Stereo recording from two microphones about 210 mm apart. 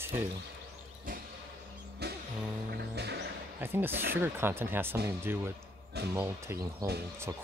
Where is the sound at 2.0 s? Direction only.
50° right (ahead or behind).